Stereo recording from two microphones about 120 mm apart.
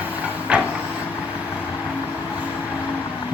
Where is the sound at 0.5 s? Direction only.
10° right (ahead or behind).